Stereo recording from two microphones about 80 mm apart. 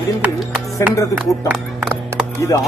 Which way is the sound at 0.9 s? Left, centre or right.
Left.